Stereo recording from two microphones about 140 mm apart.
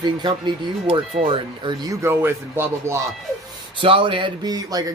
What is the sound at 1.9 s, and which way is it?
Speech, 15° right (ahead or behind).